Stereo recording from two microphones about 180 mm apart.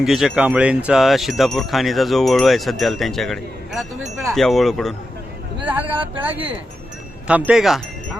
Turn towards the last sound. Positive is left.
turn(degrees=0)  # may be behind; listen again after turning